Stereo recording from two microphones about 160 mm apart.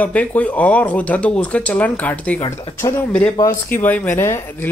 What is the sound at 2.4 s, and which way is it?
Speech, 35° left (ahead or behind).